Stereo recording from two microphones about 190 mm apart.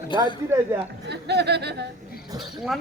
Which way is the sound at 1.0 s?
60° right (ahead or behind).